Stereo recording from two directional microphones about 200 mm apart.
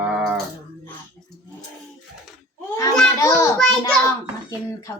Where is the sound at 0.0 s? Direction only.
5° right (ahead or behind).